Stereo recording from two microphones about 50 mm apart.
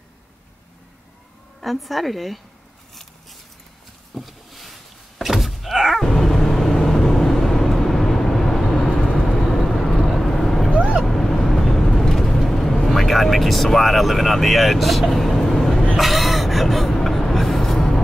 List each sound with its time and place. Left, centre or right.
1.6 s a woman's voice: centre
2.9 s a sound: centre
5.2 s thunk: centre
6.0 s vehicle: centre